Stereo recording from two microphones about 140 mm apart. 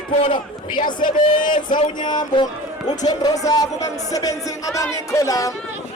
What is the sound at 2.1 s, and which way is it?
Speech, 30° left (ahead or behind).